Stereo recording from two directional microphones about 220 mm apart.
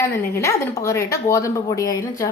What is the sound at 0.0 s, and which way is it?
A woman's voice, 10° left (ahead or behind).